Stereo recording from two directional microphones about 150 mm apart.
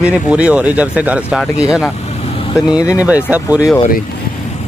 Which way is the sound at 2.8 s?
20° left (ahead or behind).